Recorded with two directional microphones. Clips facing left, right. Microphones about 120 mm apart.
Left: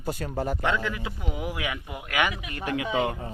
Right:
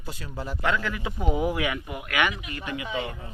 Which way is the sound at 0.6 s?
20° left (ahead or behind).